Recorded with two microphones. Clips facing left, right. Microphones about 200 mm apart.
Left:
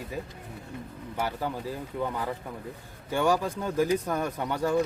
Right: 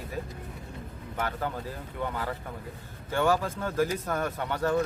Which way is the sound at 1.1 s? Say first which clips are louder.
Left 1 dB; 10° left (ahead or behind).